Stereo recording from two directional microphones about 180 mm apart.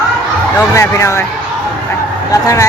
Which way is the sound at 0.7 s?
15° left (ahead or behind).